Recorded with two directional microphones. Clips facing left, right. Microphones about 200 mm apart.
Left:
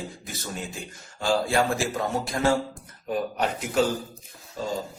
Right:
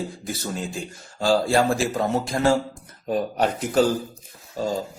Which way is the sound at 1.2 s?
35° right (ahead or behind).